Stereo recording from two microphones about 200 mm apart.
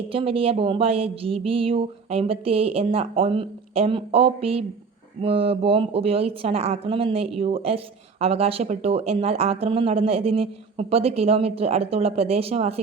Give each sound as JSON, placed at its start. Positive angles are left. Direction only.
{"t": 0.1, "sound": "speech", "side_deg": -25}